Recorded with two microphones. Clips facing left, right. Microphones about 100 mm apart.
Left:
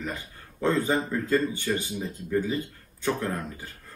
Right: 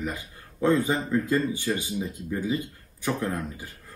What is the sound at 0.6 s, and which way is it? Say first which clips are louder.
Speech: right 1 dB; 15° right (ahead or behind).